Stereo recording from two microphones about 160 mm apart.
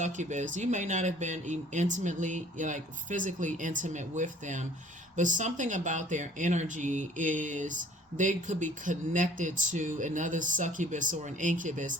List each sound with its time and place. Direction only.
0.0 s speech: 50° right (ahead or behind)